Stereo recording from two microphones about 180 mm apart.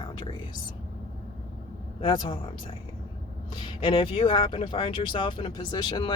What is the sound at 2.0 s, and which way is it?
Speech, 30° left (ahead or behind).